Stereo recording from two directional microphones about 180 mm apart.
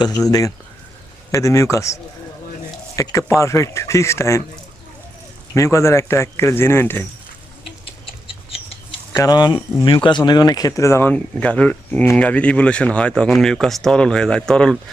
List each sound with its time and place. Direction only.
0.3 s speech: 20° left (ahead or behind)
5.5 s speech: 15° left (ahead or behind)
8.0 s a sound: 30° left (ahead or behind)
9.1 s speech: 20° left (ahead or behind); by 14.8 s 5° left (ahead or behind)